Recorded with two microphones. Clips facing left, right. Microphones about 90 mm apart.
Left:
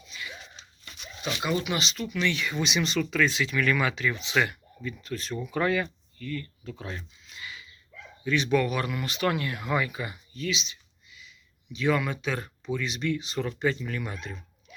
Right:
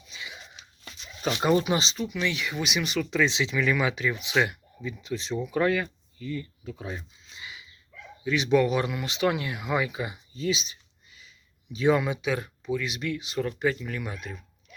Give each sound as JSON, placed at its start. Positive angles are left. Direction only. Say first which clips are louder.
{"t": 0.1, "sound": "biting", "louder": "left 1 dB", "side_deg": -20}
{"t": 0.6, "sound": "a sound", "louder": "even", "side_deg": 30}
{"t": 1.5, "sound": "speech", "louder": "right 5 dB", "side_deg": -35}
{"t": 2.0, "sound": "speech", "louder": "left 1 dB", "side_deg": -10}
{"t": 5.5, "sound": "speech", "louder": "right 1 dB", "side_deg": 0}
{"t": 6.2, "sound": "speech", "louder": "right 1 dB", "side_deg": -15}
{"t": 7.3, "sound": "a sound", "louder": "left 1 dB", "side_deg": -20}
{"t": 8.2, "sound": "speech", "louder": "right 2 dB", "side_deg": -15}
{"t": 10.5, "sound": "a sound", "louder": "right 3 dB", "side_deg": -40}
{"t": 11.9, "sound": "speech", "louder": "right 3 dB", "side_deg": -15}